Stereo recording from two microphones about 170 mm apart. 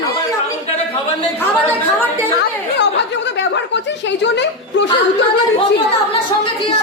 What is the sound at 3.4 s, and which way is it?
Speech, 90° left.